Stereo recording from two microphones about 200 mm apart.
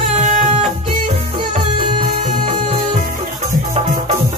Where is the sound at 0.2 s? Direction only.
40° right (ahead or behind).